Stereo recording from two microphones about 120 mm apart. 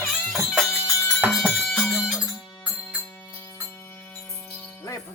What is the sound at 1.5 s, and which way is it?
Music, 15° left (ahead or behind).